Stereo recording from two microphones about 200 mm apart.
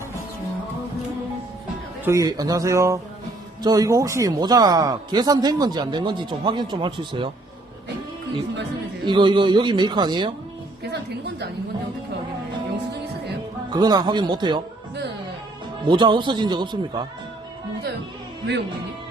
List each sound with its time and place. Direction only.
2.0 s speech: 15° right (ahead or behind)
9.0 s speech: 25° right (ahead or behind)
13.7 s speech: 20° right (ahead or behind)
15.8 s speech: 25° right (ahead or behind)